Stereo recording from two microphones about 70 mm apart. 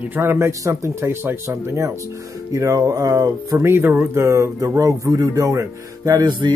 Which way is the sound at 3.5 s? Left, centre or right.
Right.